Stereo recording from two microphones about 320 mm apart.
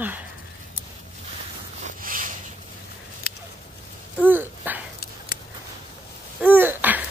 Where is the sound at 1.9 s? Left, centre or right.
Right.